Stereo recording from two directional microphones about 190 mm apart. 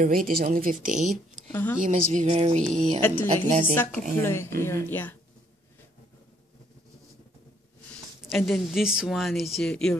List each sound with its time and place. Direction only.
0.0 s speech: 50° right (ahead or behind)
1.5 s a woman's voice: 10° left (ahead or behind)
1.8 s speech: 40° right (ahead or behind)
3.0 s a woman's voice: 10° left (ahead or behind)
8.2 s speech: centre (ahead or behind)